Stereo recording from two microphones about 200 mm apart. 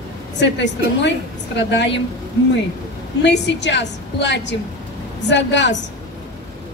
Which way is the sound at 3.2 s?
60° left (ahead or behind).